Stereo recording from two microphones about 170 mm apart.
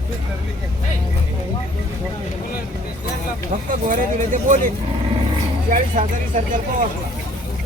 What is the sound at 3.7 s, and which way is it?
Speech, 50° right (ahead or behind).